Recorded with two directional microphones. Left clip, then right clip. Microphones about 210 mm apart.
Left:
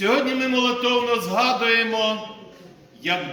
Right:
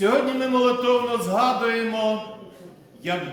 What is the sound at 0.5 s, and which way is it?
A man's voice, 20° right (ahead or behind).